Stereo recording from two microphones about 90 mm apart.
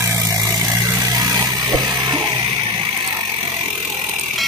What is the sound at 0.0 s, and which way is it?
Vehicle, 35° right (ahead or behind).